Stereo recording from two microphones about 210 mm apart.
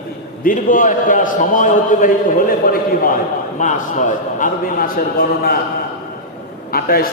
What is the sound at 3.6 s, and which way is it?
A man's voice, 35° left (ahead or behind).